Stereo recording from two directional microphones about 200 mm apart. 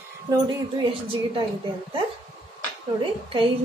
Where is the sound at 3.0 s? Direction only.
25° right (ahead or behind).